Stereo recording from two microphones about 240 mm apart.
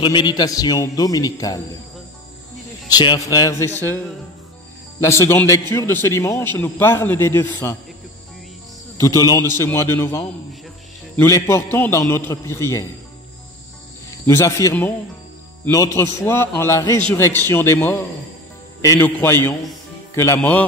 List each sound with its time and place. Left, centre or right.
0.0 s a man's voice: centre
2.9 s a man's voice: centre
5.0 s a man's voice: centre
8.9 s a man's voice: centre
14.2 s a man's voice: centre